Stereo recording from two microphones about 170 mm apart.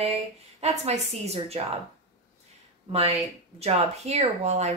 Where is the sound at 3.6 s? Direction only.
40° right (ahead or behind).